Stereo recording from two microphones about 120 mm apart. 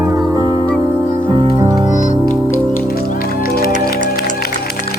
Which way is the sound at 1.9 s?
90° left.